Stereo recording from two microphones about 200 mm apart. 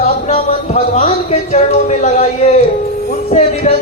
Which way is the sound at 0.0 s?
35° left (ahead or behind).